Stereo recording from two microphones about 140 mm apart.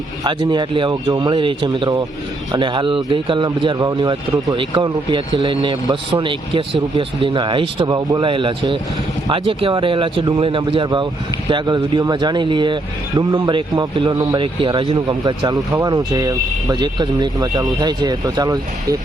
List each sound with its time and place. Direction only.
0.3 s speech: 35° right (ahead or behind)